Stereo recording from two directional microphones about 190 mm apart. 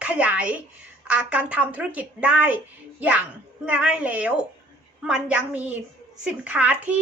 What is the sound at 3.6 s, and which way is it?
A woman's voice, 5° right (ahead or behind).